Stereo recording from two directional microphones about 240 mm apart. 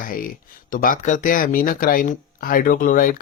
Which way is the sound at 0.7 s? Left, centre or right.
Left.